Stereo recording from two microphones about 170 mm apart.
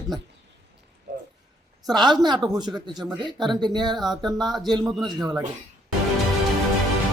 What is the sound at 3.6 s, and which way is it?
Speech, 25° right (ahead or behind).